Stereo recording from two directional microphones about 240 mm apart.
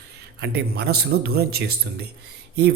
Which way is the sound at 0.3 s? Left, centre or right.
Right.